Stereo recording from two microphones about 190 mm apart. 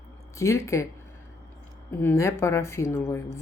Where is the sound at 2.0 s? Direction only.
15° left (ahead or behind).